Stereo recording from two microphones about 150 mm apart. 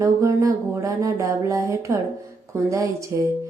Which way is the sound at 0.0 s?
20° right (ahead or behind).